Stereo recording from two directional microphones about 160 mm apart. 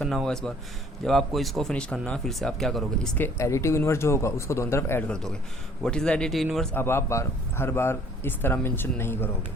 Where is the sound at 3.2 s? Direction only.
20° left (ahead or behind); by 6.7 s centre (ahead or behind).